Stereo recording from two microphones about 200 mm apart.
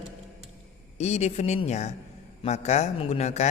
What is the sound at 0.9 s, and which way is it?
A man's voice, 35° left (ahead or behind).